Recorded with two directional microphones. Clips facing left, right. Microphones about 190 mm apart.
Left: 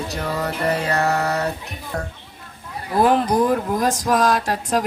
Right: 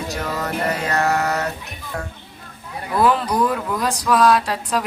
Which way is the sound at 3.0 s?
50° left (ahead or behind).